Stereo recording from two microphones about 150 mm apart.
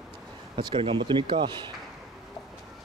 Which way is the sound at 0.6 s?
35° right (ahead or behind).